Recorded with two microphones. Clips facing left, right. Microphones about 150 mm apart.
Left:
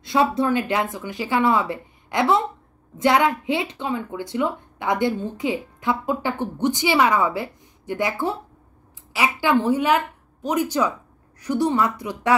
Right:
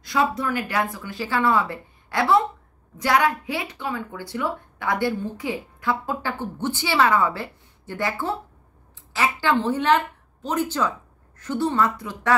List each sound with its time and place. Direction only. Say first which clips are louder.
0.0 s a woman's voice: left 3 dB; 25° left (ahead or behind)